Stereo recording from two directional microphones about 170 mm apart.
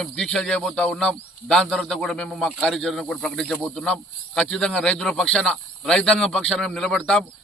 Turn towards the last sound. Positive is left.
turn(degrees=5)  # may be behind; listen again after turning